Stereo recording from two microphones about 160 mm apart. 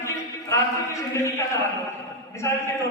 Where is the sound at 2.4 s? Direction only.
20° left (ahead or behind).